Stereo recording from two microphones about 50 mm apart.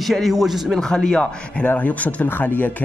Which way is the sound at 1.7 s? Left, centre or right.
Left.